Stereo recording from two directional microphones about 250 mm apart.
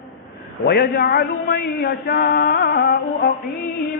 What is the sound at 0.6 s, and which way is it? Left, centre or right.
A man's voice, left.